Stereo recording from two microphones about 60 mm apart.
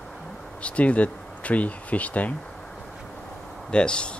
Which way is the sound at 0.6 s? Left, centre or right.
Left.